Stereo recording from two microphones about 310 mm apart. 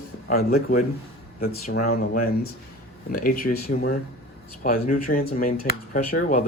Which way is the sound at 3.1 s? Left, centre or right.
Left.